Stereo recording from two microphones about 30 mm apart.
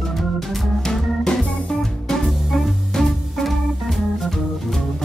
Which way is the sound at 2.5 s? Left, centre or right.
Centre.